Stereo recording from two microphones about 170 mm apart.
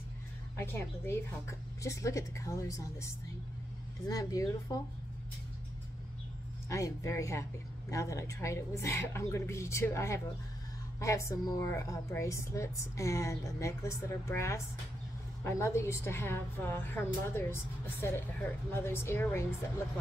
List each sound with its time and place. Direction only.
0.6 s a woman's voice: 15° left (ahead or behind)
4.1 s speech: 20° left (ahead or behind)
6.7 s a woman's voice: 20° left (ahead or behind)